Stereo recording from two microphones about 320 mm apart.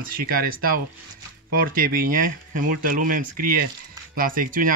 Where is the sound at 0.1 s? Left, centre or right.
Right.